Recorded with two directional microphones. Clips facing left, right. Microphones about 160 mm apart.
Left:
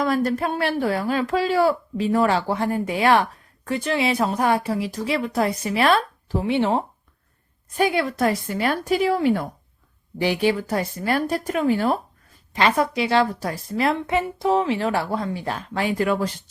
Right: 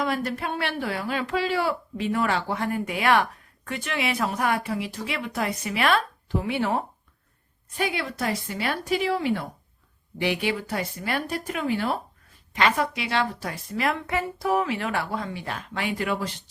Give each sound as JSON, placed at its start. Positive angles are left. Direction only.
{"t": 0.0, "sound": "speech", "side_deg": 40}
{"t": 7.8, "sound": "a woman's voice", "side_deg": 45}